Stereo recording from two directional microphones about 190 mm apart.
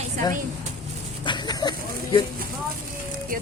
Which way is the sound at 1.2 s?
20° left (ahead or behind).